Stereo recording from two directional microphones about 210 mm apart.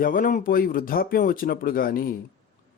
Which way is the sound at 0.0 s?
40° left (ahead or behind).